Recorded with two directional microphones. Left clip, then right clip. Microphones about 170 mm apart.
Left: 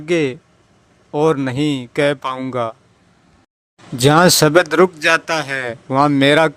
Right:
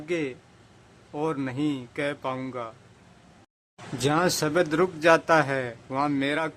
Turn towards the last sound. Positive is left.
turn(degrees=45)  # may be behind; listen again after turning